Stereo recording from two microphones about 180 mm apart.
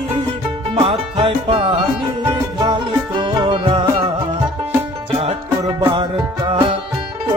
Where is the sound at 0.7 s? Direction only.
30° right (ahead or behind).